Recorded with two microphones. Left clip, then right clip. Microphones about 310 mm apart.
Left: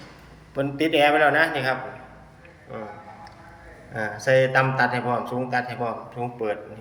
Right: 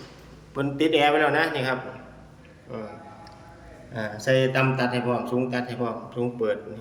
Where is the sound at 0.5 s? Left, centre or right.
Centre.